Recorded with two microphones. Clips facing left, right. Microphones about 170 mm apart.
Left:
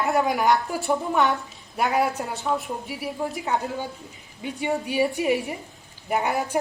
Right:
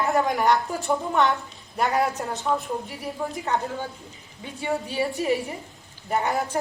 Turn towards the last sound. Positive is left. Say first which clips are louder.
# even
turn(degrees=15)  # may be behind; listen again after turning